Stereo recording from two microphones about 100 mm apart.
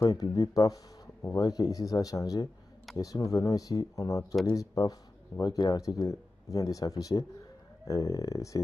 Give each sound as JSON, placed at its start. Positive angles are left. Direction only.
{"t": 0.0, "sound": "speech", "side_deg": 40}